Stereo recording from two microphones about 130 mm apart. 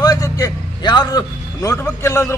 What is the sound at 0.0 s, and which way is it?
A man's voice, 30° left (ahead or behind).